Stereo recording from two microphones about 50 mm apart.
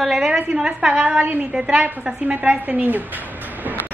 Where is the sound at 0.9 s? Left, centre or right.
Right.